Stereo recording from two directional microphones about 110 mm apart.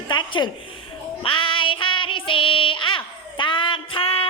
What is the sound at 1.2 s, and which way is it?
Child singing, 50° left (ahead or behind).